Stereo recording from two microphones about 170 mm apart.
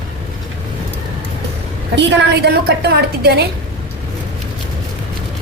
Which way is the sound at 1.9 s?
80° right.